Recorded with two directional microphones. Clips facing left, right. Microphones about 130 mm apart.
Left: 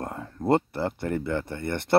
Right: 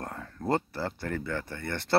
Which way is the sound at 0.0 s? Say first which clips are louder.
Left 5 dB; 20° left (ahead or behind).